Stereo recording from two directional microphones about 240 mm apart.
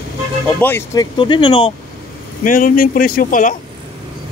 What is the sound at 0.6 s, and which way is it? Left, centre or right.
Speech, centre.